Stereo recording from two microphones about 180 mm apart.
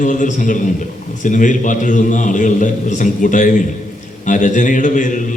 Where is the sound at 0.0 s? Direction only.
45° left (ahead or behind).